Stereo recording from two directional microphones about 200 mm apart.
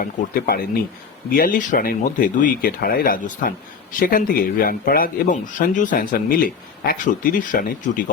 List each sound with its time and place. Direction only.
0.0 s a man's voice: 50° left (ahead or behind)